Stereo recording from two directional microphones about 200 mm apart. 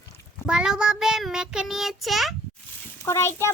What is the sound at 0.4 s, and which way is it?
Child singing, 5° right (ahead or behind).